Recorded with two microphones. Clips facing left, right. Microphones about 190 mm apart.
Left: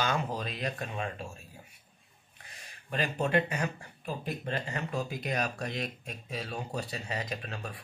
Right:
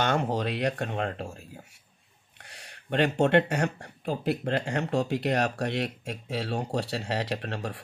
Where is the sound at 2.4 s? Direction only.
75° right (ahead or behind).